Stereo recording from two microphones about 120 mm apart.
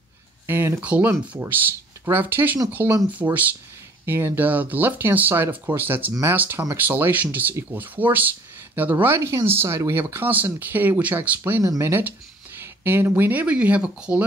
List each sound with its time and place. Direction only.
0.5 s speech: 20° right (ahead or behind)